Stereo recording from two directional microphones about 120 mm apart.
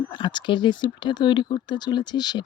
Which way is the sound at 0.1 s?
40° left (ahead or behind).